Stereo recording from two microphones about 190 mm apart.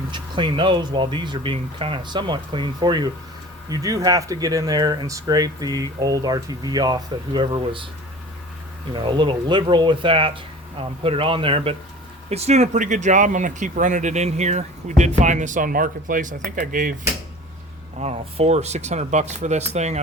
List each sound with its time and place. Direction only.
0.1 s speech: 25° right (ahead or behind)
8.9 s speech: 25° right (ahead or behind); by 16.9 s 45° right (ahead or behind)
18.0 s speech: 35° right (ahead or behind)